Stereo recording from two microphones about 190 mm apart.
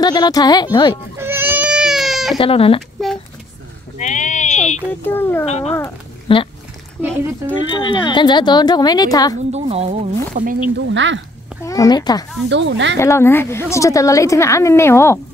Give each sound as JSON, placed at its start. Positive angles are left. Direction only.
{"t": 0.0, "sound": "a woman's voice", "side_deg": 20}
{"t": 1.1, "sound": "baby cry", "side_deg": -10}
{"t": 2.3, "sound": "speech", "side_deg": 30}
{"t": 3.0, "sound": "a sound", "side_deg": 0}
{"t": 4.0, "sound": "sheep", "side_deg": 40}
{"t": 5.0, "sound": "a woman's voice", "side_deg": 10}
{"t": 5.4, "sound": "speech", "side_deg": 35}
{"t": 7.7, "sound": "speech", "side_deg": 25}
{"t": 9.5, "sound": "speech", "side_deg": -35}
{"t": 10.9, "sound": "speech", "side_deg": -75}
{"t": 11.6, "sound": "speech", "side_deg": 20}
{"t": 12.4, "sound": "speech", "side_deg": -70}
{"t": 12.9, "sound": "a woman's voice", "side_deg": 15}